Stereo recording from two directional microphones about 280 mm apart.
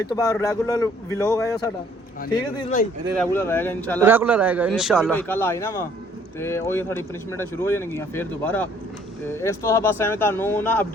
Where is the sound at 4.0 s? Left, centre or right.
Centre.